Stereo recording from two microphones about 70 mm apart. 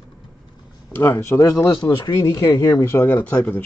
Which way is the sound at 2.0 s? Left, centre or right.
Left.